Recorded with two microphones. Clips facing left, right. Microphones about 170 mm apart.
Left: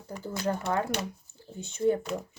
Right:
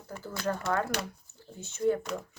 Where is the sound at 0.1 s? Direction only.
20° left (ahead or behind).